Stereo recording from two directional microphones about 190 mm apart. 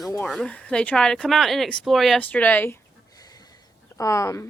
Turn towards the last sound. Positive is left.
turn(degrees=15)  # may be behind; listen again after turning